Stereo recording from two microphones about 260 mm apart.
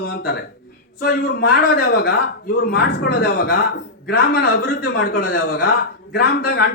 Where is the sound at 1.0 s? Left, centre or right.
Left.